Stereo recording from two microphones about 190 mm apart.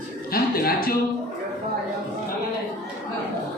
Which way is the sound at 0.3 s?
50° left (ahead or behind).